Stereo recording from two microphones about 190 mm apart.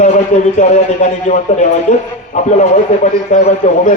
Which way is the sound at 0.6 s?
40° left (ahead or behind).